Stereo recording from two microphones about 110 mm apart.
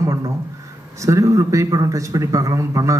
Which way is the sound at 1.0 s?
30° right (ahead or behind).